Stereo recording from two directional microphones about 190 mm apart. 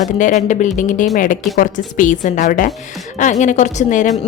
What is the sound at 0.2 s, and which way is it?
A woman's voice, 40° left (ahead or behind).